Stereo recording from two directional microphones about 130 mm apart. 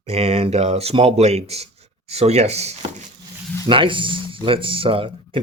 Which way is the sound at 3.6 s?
40° right (ahead or behind).